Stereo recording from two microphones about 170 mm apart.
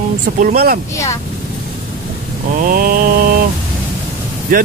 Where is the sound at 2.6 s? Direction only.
60° right (ahead or behind).